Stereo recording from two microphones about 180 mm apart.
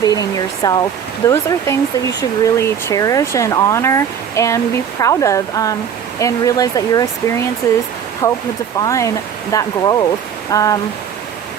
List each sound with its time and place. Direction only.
0.0 s speech: 20° left (ahead or behind)